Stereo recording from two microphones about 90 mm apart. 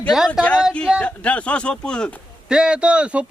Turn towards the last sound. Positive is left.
turn(degrees=-10)  # may be behind; listen again after turning